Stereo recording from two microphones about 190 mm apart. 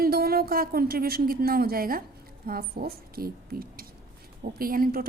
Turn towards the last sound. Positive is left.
turn(degrees=-50)  # may be behind; listen again after turning